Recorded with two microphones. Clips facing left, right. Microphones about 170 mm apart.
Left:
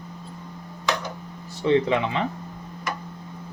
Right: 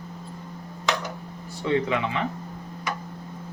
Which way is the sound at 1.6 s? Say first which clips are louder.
Left 4 dB; 30° left (ahead or behind).